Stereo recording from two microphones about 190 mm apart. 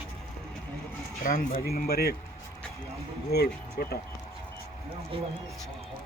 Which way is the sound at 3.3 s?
55° left (ahead or behind).